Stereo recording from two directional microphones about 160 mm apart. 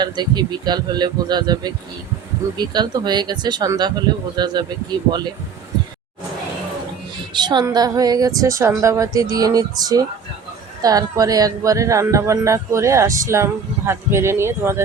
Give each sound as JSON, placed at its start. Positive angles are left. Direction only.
{"t": 0.0, "sound": "speech", "side_deg": -25}
{"t": 7.3, "sound": "speech", "side_deg": -25}